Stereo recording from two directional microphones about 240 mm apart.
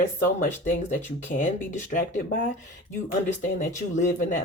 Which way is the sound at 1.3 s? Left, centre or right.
Left.